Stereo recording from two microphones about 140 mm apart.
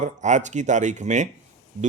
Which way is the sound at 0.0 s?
60° right (ahead or behind).